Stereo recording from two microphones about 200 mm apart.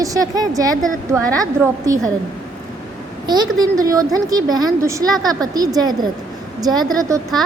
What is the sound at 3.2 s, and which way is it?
A woman's voice, 20° right (ahead or behind).